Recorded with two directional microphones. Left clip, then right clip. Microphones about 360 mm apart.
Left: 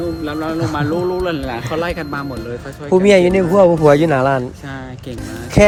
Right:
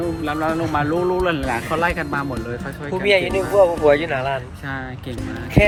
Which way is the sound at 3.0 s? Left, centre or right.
Left.